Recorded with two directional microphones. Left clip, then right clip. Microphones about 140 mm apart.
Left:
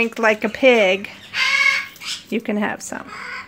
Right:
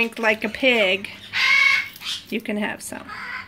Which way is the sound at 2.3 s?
30° left (ahead or behind).